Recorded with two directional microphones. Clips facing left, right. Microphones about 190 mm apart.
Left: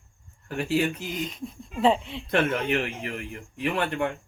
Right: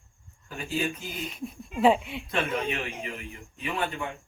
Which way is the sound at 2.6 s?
65° left (ahead or behind).